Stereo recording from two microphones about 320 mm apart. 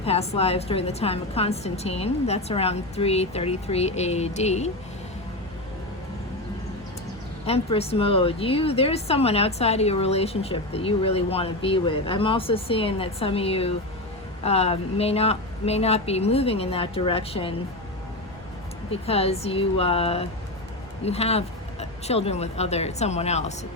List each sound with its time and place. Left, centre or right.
0.0 s a woman's voice: centre
7.4 s a woman's voice: centre
18.9 s a woman's voice: centre